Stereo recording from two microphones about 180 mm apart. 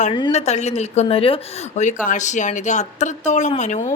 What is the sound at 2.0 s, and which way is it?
A woman's voice, 45° left (ahead or behind).